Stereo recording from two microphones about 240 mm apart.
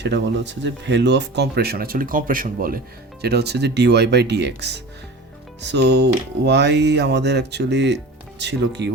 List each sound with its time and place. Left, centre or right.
0.0 s speech: right